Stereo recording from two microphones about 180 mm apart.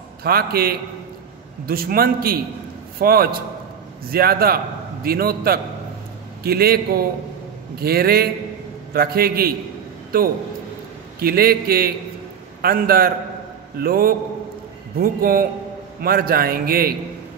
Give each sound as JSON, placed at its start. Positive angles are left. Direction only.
{"t": 0.2, "sound": "a man's voice", "side_deg": -60}